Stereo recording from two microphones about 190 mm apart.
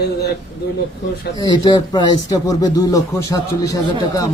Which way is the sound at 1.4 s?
25° left (ahead or behind).